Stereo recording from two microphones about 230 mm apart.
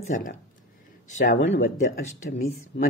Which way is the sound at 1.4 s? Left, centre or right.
Left.